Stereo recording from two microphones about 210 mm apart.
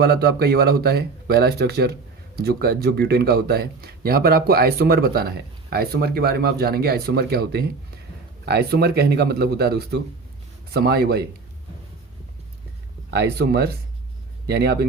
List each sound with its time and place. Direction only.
0.0 s speech: 50° right (ahead or behind)
13.1 s speech: 50° right (ahead or behind)